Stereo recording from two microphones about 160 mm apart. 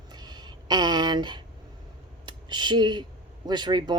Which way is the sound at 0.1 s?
25° right (ahead or behind).